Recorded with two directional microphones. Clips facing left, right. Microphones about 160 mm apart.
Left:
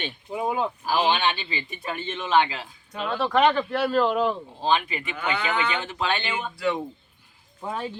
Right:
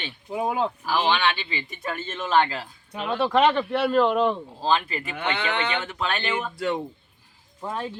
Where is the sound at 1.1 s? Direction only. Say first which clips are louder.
Right 1 dB; 40° left (ahead or behind).